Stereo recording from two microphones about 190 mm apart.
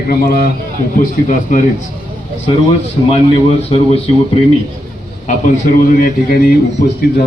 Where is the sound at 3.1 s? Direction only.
30° left (ahead or behind).